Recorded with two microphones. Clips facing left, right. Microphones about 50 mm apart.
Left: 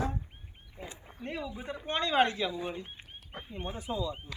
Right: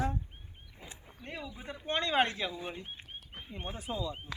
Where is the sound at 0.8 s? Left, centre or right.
Left.